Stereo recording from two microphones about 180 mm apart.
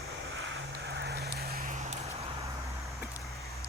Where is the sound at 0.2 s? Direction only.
90° right; by 2.2 s 40° right (ahead or behind).